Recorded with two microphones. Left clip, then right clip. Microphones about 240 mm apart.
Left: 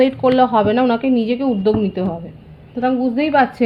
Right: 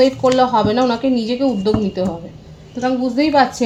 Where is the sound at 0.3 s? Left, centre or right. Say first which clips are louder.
Even; left.